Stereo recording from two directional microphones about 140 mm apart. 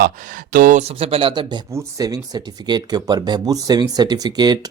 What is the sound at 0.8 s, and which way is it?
Speech, 45° right (ahead or behind).